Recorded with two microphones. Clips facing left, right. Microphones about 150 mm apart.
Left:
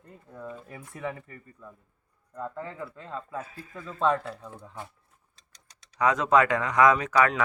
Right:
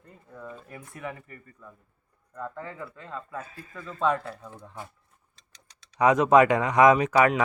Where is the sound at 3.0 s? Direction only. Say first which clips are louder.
Even; 25° left (ahead or behind).